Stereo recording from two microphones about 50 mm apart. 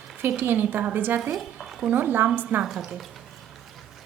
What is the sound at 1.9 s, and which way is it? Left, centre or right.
Speech, right.